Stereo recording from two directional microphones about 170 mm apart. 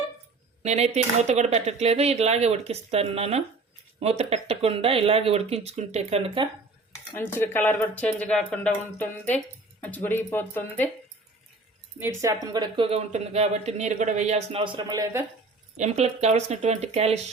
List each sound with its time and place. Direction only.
0.6 s speech: 40° right (ahead or behind)
7.2 s speech: 15° left (ahead or behind)
11.9 s speech: 15° right (ahead or behind)
15.8 s speech: 40° right (ahead or behind)